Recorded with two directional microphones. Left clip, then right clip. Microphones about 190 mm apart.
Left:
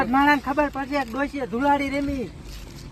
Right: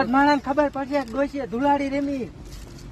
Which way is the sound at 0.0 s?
45° right (ahead or behind).